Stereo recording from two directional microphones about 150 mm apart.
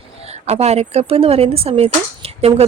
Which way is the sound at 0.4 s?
45° right (ahead or behind).